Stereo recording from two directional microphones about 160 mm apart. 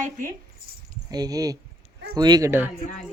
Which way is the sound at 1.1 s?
25° right (ahead or behind).